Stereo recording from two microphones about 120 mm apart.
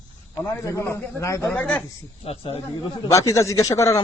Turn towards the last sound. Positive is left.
turn(degrees=25)  # may be behind; listen again after turning